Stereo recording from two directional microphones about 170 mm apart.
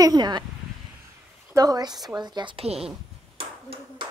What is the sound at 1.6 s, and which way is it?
Speech, 20° right (ahead or behind).